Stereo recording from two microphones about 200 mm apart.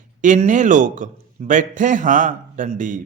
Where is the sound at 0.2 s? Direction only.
40° right (ahead or behind).